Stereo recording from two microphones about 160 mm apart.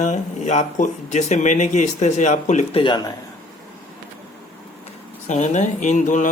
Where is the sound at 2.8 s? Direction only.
25° left (ahead or behind).